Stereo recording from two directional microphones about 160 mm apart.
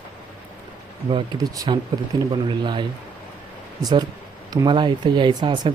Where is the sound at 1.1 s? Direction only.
25° right (ahead or behind).